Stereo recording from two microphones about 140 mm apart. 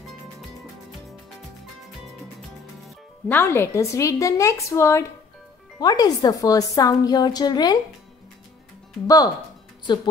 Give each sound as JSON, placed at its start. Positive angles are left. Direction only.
{"t": 3.3, "sound": "a woman's voice", "side_deg": 15}
{"t": 9.0, "sound": "a woman's voice", "side_deg": 25}